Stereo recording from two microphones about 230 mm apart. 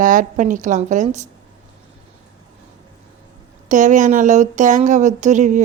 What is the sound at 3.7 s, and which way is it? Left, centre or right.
Speech, right.